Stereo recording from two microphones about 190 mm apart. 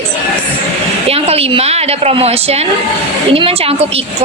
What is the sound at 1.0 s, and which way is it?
A woman's voice, 30° right (ahead or behind).